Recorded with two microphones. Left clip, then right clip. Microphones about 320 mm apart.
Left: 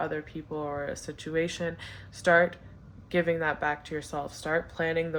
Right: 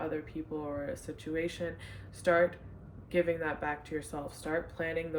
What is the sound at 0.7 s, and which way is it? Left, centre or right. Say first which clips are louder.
Speech: left 4 dB; centre.